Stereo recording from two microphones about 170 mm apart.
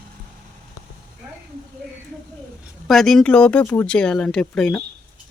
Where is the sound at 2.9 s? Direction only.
Centre (ahead or behind).